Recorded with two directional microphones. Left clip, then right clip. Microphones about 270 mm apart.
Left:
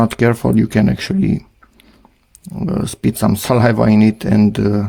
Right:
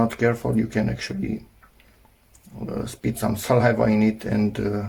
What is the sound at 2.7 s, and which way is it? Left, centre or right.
Speech, left.